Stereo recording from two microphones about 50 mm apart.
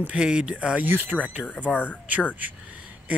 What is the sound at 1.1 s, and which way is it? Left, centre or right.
Speech, left.